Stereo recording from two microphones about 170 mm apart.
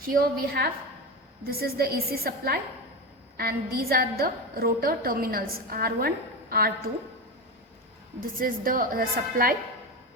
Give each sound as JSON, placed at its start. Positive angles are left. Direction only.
{"t": 0.1, "sound": "a woman's voice", "side_deg": -60}
{"t": 8.4, "sound": "a woman's voice", "side_deg": -55}